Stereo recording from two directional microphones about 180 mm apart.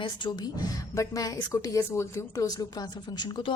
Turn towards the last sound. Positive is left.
turn(degrees=25)  # may be behind; listen again after turning